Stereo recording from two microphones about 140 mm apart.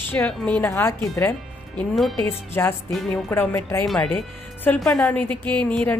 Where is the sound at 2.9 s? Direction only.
Centre (ahead or behind).